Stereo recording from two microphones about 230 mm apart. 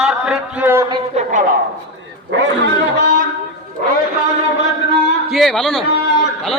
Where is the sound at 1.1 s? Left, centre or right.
Right.